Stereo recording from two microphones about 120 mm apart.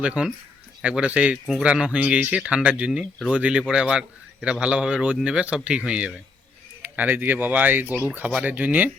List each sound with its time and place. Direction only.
0.0 s speech: 10° right (ahead or behind)